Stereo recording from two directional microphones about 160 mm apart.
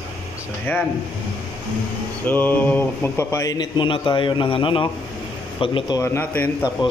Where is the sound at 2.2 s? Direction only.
10° left (ahead or behind); by 6.0 s 30° left (ahead or behind).